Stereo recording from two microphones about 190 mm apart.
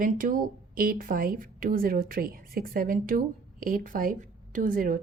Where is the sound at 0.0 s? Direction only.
45° right (ahead or behind).